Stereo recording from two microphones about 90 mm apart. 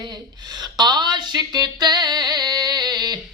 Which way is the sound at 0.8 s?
55° right (ahead or behind).